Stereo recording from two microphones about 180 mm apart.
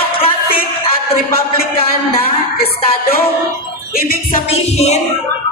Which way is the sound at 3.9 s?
55° left (ahead or behind).